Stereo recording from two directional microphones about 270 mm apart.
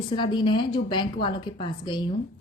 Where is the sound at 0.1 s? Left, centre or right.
Centre.